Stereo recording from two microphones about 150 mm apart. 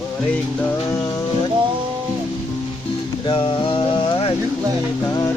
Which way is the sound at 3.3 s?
35° left (ahead or behind).